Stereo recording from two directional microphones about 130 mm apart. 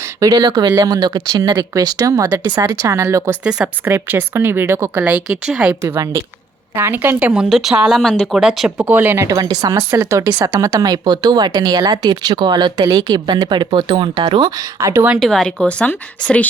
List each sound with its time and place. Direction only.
0.0 s speech: 25° right (ahead or behind)
3.4 s speech: 5° right (ahead or behind)
3.8 s a woman's voice: 15° right (ahead or behind)
5.1 s a woman's voice: 5° right (ahead or behind)
5.8 s a woman's voice: 25° right (ahead or behind)
15.2 s a woman's voice: 5° left (ahead or behind)